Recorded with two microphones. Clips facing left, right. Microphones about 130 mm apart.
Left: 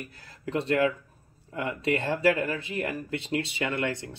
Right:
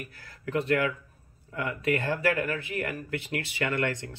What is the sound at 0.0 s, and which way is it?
Speech, 25° left (ahead or behind).